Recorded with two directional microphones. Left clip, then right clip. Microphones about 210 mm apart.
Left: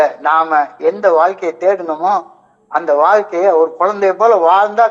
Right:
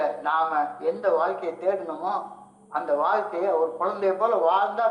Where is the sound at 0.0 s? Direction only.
50° left (ahead or behind).